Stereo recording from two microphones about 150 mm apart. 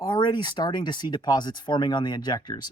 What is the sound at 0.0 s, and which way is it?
Speech, 30° left (ahead or behind).